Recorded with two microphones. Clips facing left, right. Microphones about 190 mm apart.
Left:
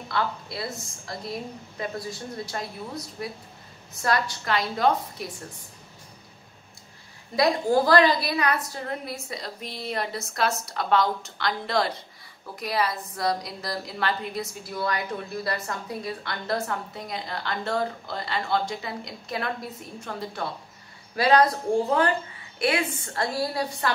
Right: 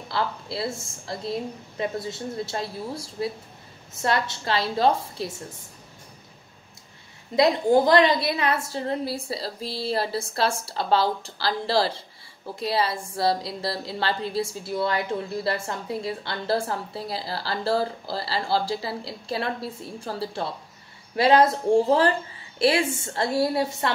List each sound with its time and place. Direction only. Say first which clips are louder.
0.1 s a woman's voice: right 1 dB; 30° right (ahead or behind)
7.3 s a woman's voice: right 3 dB; 20° right (ahead or behind)